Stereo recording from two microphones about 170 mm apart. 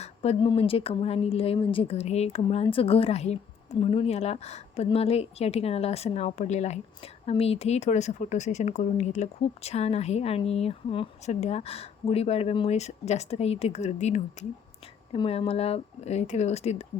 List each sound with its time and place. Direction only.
0.0 s a woman's voice: 35° left (ahead or behind)